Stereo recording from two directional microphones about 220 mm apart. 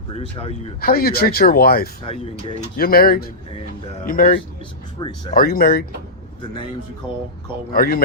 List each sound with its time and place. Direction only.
0.1 s speech: 25° left (ahead or behind)
0.8 s speech: 40° left (ahead or behind)
7.7 s speech: 40° left (ahead or behind)